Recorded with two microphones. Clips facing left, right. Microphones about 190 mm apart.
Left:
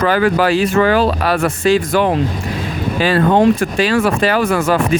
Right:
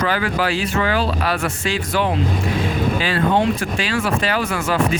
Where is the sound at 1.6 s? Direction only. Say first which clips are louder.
Left 9 dB; 40° left (ahead or behind).